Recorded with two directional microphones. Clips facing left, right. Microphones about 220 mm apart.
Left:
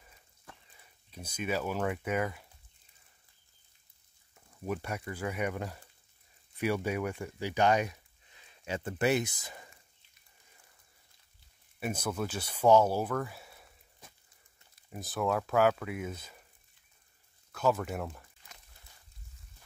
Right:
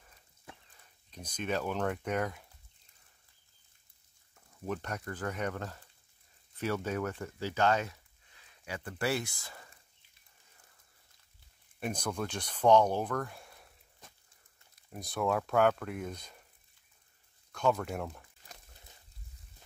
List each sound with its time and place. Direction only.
0.7 s speech: 10° left (ahead or behind)
4.6 s speech: 10° left (ahead or behind)
11.8 s speech: 5° left (ahead or behind)
17.5 s speech: 5° left (ahead or behind)